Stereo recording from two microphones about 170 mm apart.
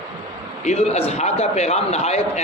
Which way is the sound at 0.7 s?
40° left (ahead or behind).